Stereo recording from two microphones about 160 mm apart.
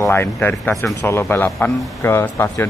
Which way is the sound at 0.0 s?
15° left (ahead or behind).